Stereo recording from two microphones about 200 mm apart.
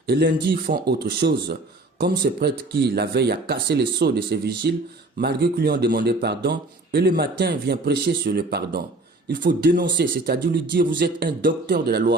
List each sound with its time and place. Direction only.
0.1 s speech: 55° right (ahead or behind)